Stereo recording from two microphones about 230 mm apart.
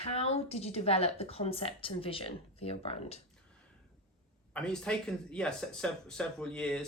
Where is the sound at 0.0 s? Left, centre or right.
Left.